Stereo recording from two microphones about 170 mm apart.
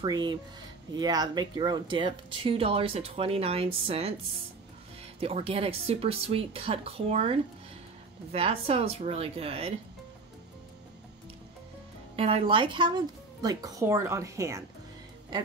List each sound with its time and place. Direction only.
0.0 s speech: 25° right (ahead or behind)
5.2 s speech: 35° right (ahead or behind)
12.2 s speech: 35° right (ahead or behind); by 14.6 s 15° right (ahead or behind)